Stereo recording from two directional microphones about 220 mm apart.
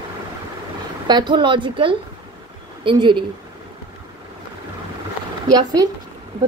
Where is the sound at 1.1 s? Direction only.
20° right (ahead or behind).